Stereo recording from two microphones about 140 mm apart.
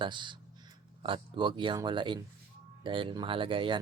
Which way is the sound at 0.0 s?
35° right (ahead or behind).